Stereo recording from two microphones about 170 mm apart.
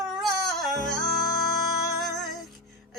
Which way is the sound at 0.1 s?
Centre (ahead or behind).